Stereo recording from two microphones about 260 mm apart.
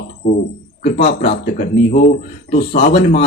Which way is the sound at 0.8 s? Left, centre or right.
Left.